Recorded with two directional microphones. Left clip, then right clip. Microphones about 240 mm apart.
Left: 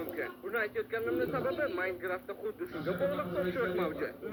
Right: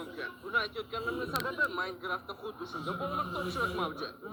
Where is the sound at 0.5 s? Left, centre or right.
Right.